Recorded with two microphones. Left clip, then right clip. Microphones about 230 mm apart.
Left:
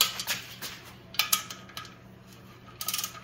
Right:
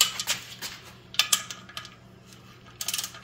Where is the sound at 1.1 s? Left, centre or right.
Centre.